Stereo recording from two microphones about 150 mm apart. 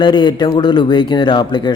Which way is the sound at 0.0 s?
30° left (ahead or behind).